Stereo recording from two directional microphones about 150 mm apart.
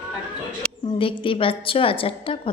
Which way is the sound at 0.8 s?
35° left (ahead or behind).